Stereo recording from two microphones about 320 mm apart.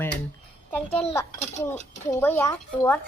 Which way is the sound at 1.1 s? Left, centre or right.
Centre.